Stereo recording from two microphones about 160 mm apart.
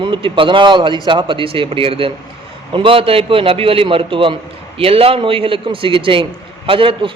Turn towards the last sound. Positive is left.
turn(degrees=-35)  # may be behind; listen again after turning